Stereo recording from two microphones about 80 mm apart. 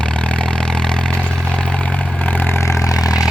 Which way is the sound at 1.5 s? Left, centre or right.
Centre.